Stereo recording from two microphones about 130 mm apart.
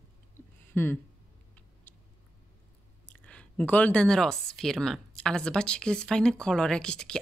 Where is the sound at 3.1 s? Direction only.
10° left (ahead or behind).